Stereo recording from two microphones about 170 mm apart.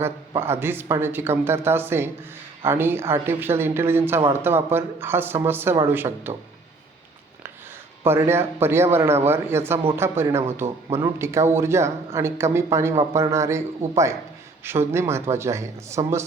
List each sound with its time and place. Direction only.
0.0 s speech: 15° right (ahead or behind)
8.0 s speech: 15° right (ahead or behind)